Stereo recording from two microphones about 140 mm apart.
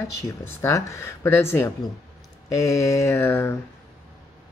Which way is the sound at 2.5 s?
20° left (ahead or behind).